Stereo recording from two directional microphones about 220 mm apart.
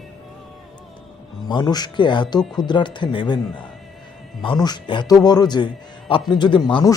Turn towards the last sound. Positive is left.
turn(degrees=20)  # may be behind; listen again after turning